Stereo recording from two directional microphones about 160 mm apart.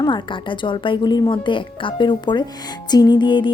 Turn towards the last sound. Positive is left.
turn(degrees=30)  # may be behind; listen again after turning